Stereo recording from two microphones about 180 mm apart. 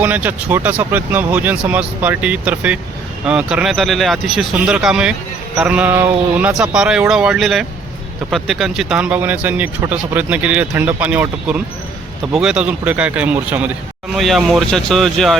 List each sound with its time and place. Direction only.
0.0 s speech: 10° right (ahead or behind)